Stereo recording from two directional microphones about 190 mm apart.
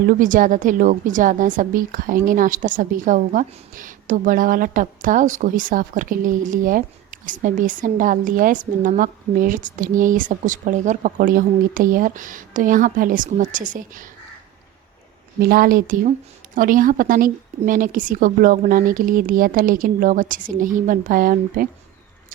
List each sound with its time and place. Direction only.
0.1 s a woman's voice: 45° right (ahead or behind)
15.4 s a woman's voice: 50° right (ahead or behind)